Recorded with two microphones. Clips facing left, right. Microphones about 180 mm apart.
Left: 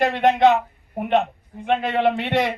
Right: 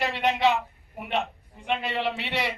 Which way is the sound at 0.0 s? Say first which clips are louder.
Left 7 dB; 50° left (ahead or behind).